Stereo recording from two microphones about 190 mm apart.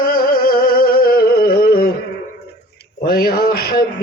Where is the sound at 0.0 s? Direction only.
50° left (ahead or behind).